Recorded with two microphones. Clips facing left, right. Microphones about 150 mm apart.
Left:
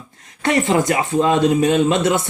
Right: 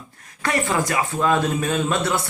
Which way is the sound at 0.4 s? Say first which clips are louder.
Left 6 dB; 20° left (ahead or behind).